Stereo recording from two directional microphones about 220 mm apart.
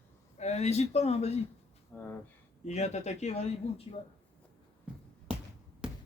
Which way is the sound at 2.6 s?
30° left (ahead or behind).